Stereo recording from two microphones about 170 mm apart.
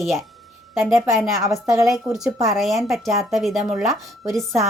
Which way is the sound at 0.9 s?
15° right (ahead or behind).